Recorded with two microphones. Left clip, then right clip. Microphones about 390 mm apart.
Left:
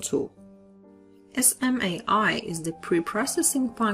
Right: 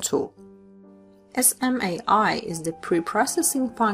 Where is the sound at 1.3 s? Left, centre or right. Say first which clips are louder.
Right 2 dB; centre.